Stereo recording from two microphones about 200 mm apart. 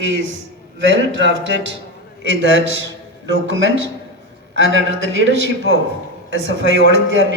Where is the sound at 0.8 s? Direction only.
65° right (ahead or behind).